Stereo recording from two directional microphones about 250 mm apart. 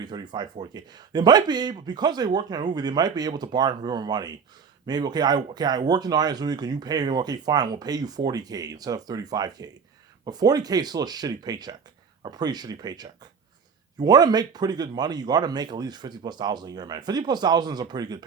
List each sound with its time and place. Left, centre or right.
0.0 s speech: centre